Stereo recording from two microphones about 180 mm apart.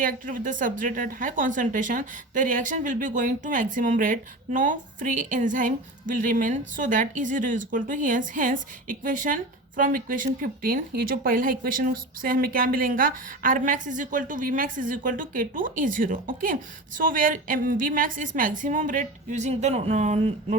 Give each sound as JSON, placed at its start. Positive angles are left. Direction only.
{"t": 0.0, "sound": "speech", "side_deg": -50}